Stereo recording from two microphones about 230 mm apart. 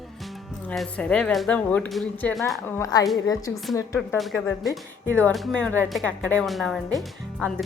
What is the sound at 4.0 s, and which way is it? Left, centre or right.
Speech, centre.